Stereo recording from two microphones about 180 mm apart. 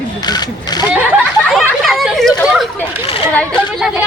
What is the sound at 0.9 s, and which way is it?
Snicker, 5° right (ahead or behind).